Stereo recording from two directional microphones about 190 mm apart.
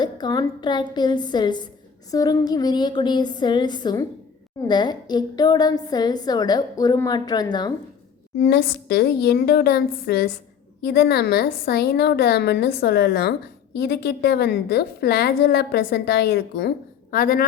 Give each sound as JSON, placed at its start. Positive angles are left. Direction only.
{"t": 0.0, "sound": "a woman's voice", "side_deg": 20}
{"t": 8.4, "sound": "a woman's voice", "side_deg": 60}